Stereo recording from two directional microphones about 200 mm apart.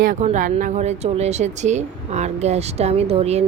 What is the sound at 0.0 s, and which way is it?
Speech, 40° right (ahead or behind).